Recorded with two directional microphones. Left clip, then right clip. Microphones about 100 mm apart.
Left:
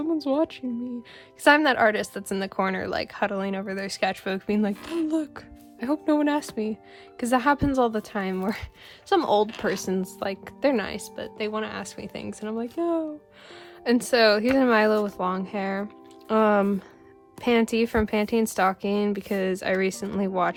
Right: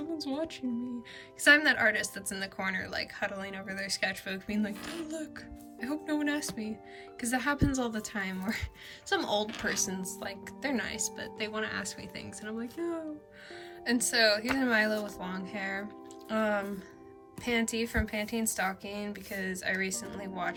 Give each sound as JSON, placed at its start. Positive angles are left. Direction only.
{"t": 0.2, "sound": "a woman's voice", "side_deg": 50}
{"t": 13.8, "sound": "a woman's voice", "side_deg": 50}